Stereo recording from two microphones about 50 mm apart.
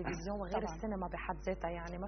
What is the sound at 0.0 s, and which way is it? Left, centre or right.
A woman's voice, centre.